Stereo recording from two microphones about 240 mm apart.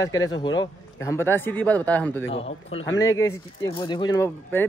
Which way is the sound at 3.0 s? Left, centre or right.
Centre.